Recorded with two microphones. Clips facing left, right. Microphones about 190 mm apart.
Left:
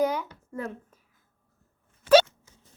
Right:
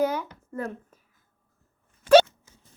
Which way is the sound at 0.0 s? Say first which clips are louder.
Even; 10° left (ahead or behind).